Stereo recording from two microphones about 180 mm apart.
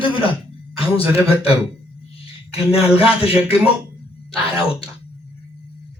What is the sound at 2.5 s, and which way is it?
Speech, 35° left (ahead or behind).